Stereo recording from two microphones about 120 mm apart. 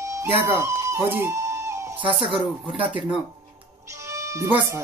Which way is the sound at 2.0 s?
45° right (ahead or behind).